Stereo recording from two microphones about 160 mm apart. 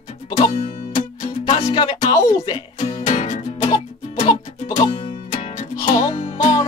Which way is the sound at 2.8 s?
45° left (ahead or behind).